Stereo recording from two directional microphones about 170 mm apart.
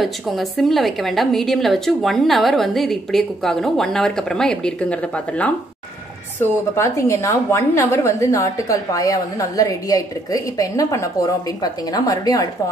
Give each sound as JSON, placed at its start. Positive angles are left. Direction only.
{"t": 0.0, "sound": "a woman's voice", "side_deg": 0}